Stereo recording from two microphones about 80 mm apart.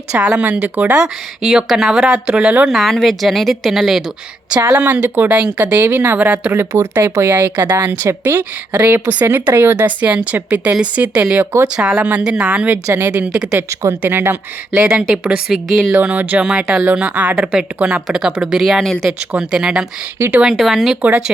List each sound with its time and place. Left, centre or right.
0.1 s a woman's voice: centre
2.6 s speech: centre
4.8 s a woman's voice: right
13.1 s a woman's voice: centre
14.0 s speech: right
14.8 s a woman's voice: centre
18.6 s speech: centre
19.3 s a woman's voice: centre